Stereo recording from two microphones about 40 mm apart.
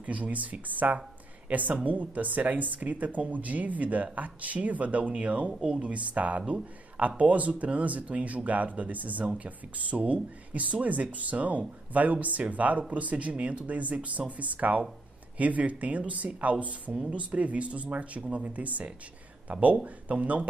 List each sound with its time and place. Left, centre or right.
0.0 s speech: right